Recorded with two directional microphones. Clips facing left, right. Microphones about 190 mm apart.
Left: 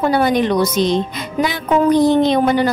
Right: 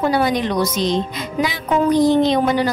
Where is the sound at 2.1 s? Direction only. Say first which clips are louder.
Left 2 dB; 55° left (ahead or behind).